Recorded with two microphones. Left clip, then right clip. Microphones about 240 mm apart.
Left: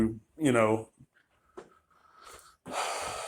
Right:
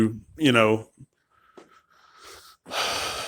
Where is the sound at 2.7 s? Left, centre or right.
Right.